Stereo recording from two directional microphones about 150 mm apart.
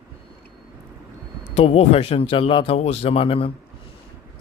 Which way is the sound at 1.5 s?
45° left (ahead or behind).